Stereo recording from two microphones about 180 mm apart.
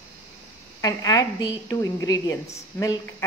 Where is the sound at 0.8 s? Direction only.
20° left (ahead or behind).